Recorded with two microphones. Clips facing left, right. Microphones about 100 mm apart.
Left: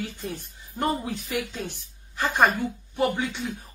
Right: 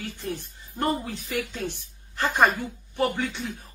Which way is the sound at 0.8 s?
15° left (ahead or behind).